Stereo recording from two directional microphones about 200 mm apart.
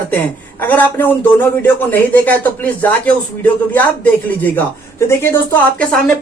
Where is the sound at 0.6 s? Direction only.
10° left (ahead or behind).